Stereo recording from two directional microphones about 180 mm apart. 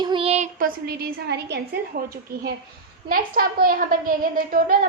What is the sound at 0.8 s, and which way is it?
Speech, 55° right (ahead or behind).